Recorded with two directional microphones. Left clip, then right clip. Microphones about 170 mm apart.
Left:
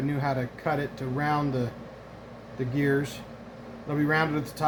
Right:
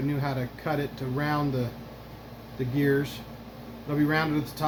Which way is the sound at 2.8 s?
40° left (ahead or behind).